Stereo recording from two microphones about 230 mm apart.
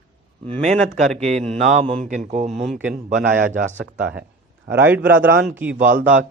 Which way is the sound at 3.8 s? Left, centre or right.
Right.